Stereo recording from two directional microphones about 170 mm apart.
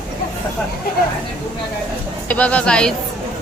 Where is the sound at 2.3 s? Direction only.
10° left (ahead or behind).